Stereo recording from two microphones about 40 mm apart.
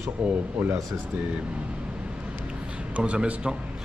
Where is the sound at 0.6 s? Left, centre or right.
Right.